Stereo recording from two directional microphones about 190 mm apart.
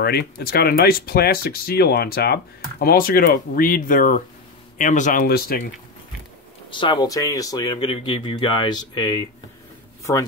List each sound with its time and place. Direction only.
0.0 s speech: 55° left (ahead or behind)
6.7 s speech: 25° left (ahead or behind)